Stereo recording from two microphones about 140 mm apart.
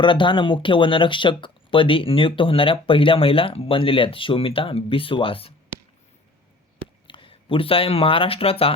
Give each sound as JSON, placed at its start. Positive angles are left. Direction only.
{"t": 0.0, "sound": "speech", "side_deg": 35}
{"t": 7.1, "sound": "speech", "side_deg": 40}